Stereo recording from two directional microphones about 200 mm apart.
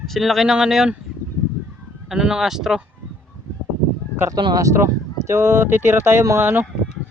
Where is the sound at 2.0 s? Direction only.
5° right (ahead or behind).